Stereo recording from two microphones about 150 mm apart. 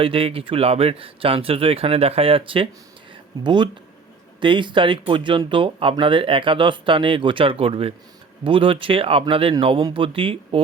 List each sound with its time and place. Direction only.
0.0 s speech: 35° right (ahead or behind)